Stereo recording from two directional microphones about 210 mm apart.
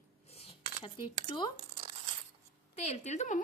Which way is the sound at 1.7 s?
25° right (ahead or behind).